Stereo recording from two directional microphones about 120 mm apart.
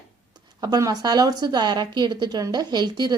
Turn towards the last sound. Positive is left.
turn(degrees=-35)  # may be behind; listen again after turning